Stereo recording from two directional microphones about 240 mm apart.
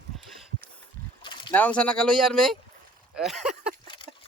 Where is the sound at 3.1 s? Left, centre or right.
Centre.